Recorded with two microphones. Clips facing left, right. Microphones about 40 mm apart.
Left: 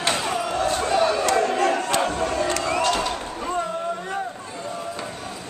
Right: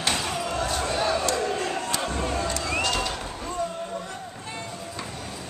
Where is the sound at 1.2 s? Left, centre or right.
Left.